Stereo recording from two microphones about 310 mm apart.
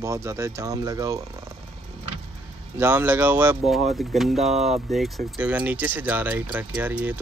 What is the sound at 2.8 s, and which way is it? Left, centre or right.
Speech, centre.